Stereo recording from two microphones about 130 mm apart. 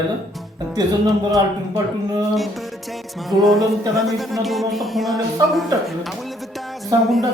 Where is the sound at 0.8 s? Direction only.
30° right (ahead or behind).